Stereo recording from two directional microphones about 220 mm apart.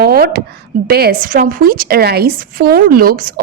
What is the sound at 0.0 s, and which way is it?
A woman's voice, 45° right (ahead or behind).